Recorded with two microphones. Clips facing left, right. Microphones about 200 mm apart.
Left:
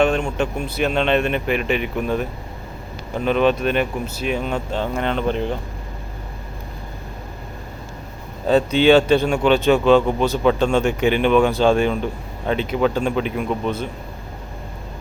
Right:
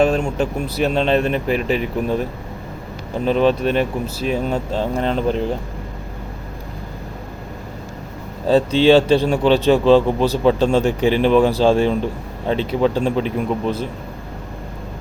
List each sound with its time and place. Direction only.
0.0 s a sound: 35° right (ahead or behind)
0.3 s speech: 35° right (ahead or behind)
3.2 s speech: 30° right (ahead or behind)
8.4 s speech: 30° right (ahead or behind)